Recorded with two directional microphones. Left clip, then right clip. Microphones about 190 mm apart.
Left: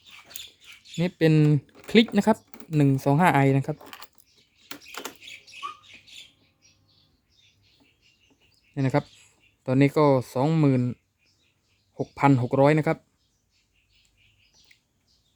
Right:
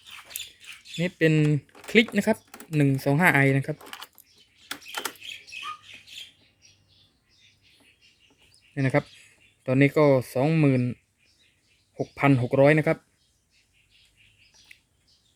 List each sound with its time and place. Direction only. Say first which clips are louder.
0.9 s speech: left 1 dB; 20° left (ahead or behind)
2.2 s speech: left 2 dB; 15° left (ahead or behind)
4.7 s bird: right 5 dB; 5° left (ahead or behind)
8.7 s speech: right 1 dB; 10° left (ahead or behind)
11.9 s speech: left 1 dB; 10° left (ahead or behind)